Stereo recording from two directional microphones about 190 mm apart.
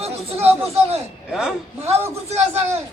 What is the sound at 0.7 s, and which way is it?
Speech, 30° right (ahead or behind).